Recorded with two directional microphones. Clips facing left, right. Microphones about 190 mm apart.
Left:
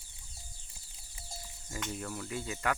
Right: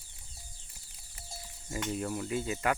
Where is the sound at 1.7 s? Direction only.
15° right (ahead or behind).